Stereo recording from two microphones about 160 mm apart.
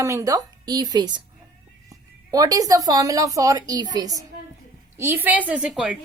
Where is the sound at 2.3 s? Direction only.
20° right (ahead or behind).